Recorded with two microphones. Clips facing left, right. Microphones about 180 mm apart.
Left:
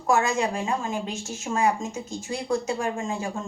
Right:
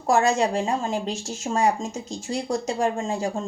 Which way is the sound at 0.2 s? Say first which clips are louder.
Right 4 dB; 35° right (ahead or behind).